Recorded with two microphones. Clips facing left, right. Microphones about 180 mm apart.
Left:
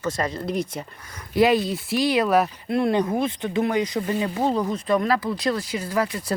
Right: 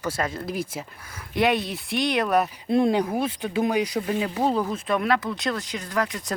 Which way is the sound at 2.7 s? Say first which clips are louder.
Right 2 dB; 20° right (ahead or behind).